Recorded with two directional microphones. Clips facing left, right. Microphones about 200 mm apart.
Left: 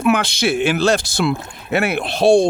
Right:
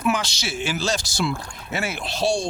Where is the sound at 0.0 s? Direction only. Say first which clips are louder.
Left 7 dB; 55° left (ahead or behind).